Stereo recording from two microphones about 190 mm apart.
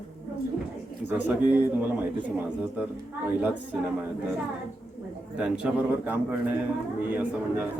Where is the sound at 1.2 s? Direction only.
10° right (ahead or behind).